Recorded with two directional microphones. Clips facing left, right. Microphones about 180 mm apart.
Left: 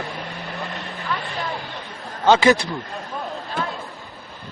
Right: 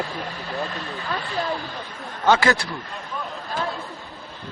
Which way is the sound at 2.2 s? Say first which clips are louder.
Left 4 dB; 20° left (ahead or behind).